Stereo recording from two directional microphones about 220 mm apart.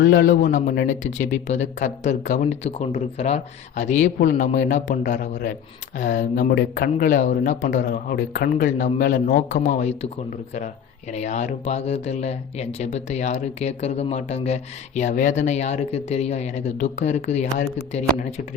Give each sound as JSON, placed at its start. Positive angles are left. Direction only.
{"t": 0.0, "sound": "speech", "side_deg": 45}
{"t": 11.1, "sound": "speech", "side_deg": 30}